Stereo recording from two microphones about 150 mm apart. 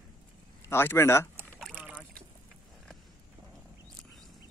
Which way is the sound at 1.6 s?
10° right (ahead or behind).